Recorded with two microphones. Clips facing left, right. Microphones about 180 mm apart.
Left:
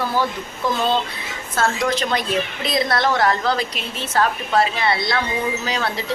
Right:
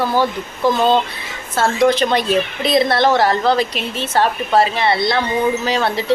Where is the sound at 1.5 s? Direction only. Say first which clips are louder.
Right 6 dB; 30° right (ahead or behind).